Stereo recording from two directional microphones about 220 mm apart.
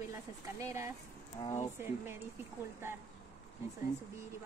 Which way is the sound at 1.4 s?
20° left (ahead or behind).